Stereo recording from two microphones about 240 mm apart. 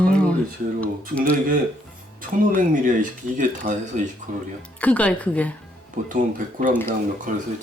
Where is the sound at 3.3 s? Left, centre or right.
Right.